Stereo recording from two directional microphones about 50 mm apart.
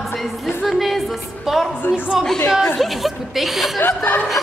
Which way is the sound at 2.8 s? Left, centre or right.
Centre.